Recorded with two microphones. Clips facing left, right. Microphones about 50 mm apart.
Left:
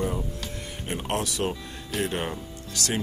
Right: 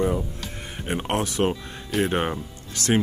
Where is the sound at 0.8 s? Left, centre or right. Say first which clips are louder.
Right 4 dB; right.